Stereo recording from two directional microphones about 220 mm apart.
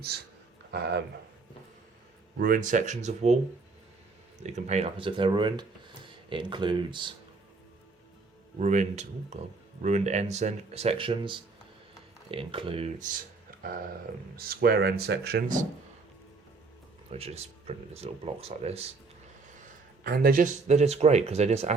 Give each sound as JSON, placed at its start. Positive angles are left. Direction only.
{"t": 0.7, "sound": "speech", "side_deg": -45}
{"t": 2.4, "sound": "speech", "side_deg": -35}
{"t": 4.4, "sound": "speech", "side_deg": -30}
{"t": 8.5, "sound": "speech", "side_deg": -30}
{"t": 13.6, "sound": "speech", "side_deg": -40}
{"t": 17.1, "sound": "speech", "side_deg": -30}
{"t": 20.1, "sound": "speech", "side_deg": -40}